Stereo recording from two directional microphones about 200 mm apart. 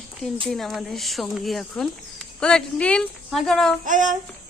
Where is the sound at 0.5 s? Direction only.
Centre (ahead or behind).